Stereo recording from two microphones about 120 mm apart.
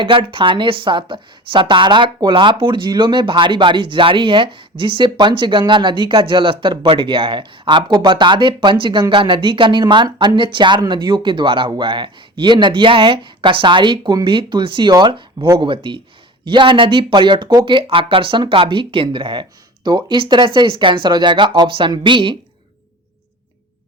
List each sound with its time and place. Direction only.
0.0 s a woman's voice: 45° right (ahead or behind)